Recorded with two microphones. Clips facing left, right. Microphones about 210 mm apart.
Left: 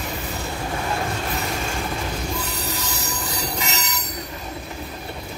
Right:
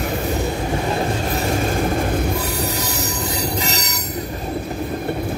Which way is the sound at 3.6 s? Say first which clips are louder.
Right 5 dB; 35° right (ahead or behind).